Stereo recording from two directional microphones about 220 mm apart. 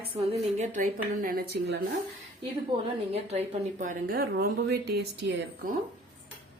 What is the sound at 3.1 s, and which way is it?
A woman's voice, 30° right (ahead or behind).